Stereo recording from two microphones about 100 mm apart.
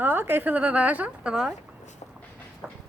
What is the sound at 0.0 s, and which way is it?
A woman's voice, 20° right (ahead or behind).